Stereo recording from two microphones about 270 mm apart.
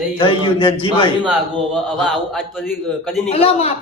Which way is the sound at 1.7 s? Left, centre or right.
Centre.